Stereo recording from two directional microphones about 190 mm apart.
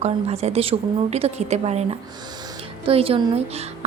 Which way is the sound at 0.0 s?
35° right (ahead or behind).